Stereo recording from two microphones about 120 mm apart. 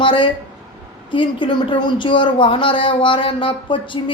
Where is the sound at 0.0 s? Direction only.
45° left (ahead or behind).